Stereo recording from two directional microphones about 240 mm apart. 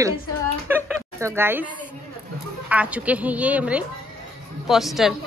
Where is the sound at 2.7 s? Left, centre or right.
Centre.